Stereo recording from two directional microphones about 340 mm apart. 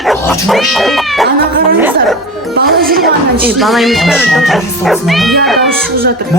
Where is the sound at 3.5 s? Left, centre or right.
Centre.